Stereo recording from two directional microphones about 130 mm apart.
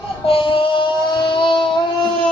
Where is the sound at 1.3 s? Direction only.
40° left (ahead or behind).